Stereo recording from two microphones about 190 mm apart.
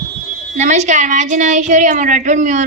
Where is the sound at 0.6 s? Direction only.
40° right (ahead or behind).